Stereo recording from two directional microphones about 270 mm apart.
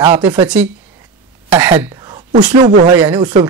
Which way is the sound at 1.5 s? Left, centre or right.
Centre.